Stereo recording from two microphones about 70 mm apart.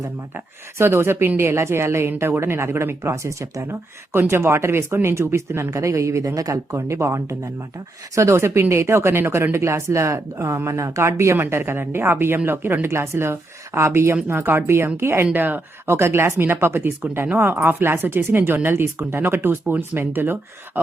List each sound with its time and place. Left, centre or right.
0.3 s speech: right
3.6 s speech: right